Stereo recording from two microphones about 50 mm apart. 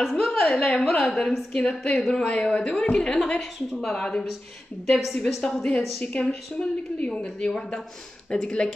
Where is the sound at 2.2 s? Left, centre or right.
Left.